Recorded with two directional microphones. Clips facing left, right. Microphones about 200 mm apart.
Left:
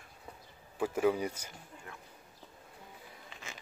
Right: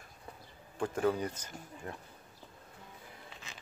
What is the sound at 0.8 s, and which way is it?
Speech, 5° left (ahead or behind).